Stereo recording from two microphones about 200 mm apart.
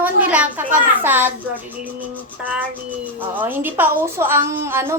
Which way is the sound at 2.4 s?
5° right (ahead or behind).